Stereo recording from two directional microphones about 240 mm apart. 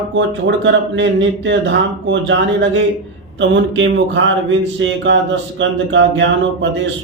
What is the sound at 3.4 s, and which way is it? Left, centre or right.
Speech, right.